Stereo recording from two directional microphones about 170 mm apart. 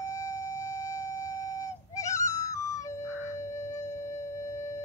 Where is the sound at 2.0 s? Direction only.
20° left (ahead or behind).